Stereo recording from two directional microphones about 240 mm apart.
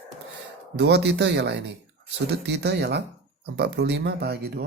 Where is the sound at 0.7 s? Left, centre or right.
Right.